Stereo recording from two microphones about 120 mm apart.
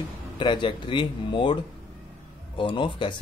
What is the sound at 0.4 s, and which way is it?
Speech, 40° left (ahead or behind).